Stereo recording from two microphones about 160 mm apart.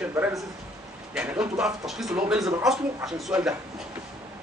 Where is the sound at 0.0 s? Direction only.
15° right (ahead or behind).